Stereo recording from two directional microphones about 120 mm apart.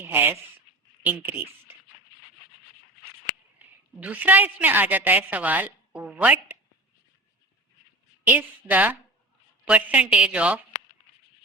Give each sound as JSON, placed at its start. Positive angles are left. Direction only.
{"t": 0.0, "sound": "a woman's voice", "side_deg": -15}
{"t": 3.6, "sound": "a woman's voice", "side_deg": -15}
{"t": 8.3, "sound": "a woman's voice", "side_deg": -15}